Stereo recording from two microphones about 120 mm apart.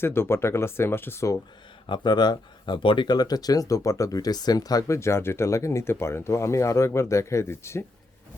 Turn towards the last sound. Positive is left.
turn(degrees=20)  # may be behind; listen again after turning